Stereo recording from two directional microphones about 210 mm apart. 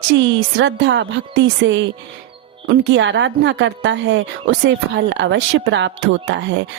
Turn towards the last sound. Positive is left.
turn(degrees=-60)  # may be behind; listen again after turning